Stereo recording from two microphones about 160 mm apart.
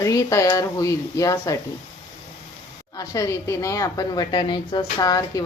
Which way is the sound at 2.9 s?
20° left (ahead or behind).